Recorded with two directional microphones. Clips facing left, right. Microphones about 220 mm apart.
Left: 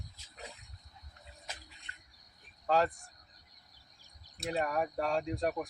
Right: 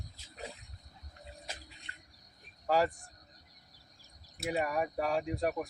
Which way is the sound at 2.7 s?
10° right (ahead or behind).